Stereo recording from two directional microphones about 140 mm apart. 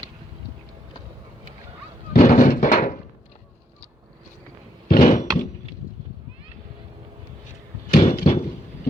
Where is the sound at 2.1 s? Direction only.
70° left (ahead or behind).